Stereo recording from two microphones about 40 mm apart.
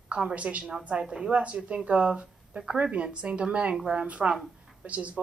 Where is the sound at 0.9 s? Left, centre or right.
Right.